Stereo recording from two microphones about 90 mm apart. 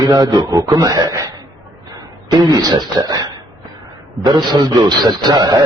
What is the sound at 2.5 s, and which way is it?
A man's voice, 45° right (ahead or behind).